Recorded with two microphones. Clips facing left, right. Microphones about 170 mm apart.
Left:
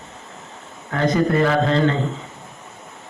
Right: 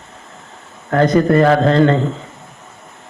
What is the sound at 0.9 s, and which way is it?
A man's voice, 55° right (ahead or behind).